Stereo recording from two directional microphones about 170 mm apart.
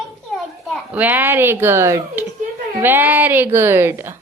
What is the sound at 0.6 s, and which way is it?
A child's voice, 5° right (ahead or behind).